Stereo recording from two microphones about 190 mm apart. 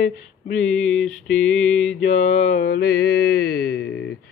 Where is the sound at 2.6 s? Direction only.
55° left (ahead or behind).